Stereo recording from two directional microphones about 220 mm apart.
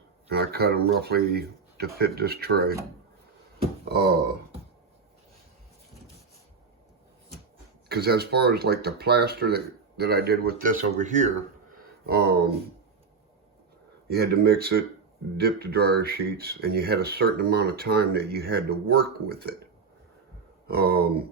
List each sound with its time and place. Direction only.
0.3 s speech: 45° right (ahead or behind)
3.8 s speech: 45° right (ahead or behind)
7.9 s speech: 45° right (ahead or behind)
12.0 s speech: 45° right (ahead or behind)
14.1 s speech: 45° right (ahead or behind)
20.7 s speech: 45° right (ahead or behind)